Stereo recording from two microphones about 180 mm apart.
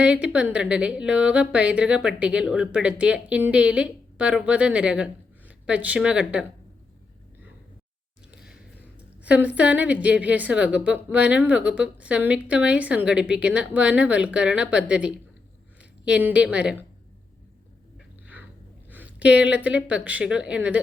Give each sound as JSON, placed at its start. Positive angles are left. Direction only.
{"t": 0.0, "sound": "a woman's voice", "side_deg": -5}
{"t": 9.2, "sound": "a woman's voice", "side_deg": -10}
{"t": 18.9, "sound": "a woman's voice", "side_deg": -10}